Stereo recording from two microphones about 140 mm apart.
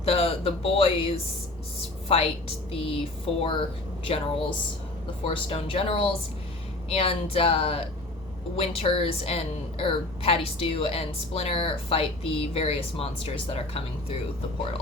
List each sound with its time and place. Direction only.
0.0 s a woman's voice: 45° left (ahead or behind)
4.1 s a woman's voice: 40° left (ahead or behind)